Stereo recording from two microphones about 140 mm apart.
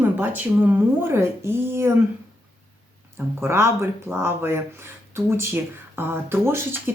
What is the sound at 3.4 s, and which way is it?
Speech, 20° right (ahead or behind).